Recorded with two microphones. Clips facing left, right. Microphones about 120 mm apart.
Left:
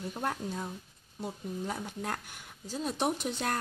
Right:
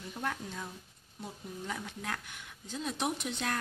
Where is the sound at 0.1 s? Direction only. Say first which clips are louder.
Left 1 dB; 35° left (ahead or behind).